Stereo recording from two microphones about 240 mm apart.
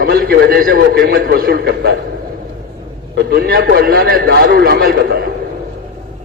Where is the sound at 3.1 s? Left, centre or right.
Right.